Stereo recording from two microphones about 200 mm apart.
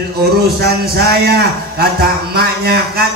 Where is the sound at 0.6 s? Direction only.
50° right (ahead or behind).